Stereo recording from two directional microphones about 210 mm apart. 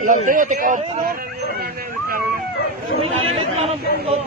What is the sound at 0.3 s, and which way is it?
Speech, 40° right (ahead or behind).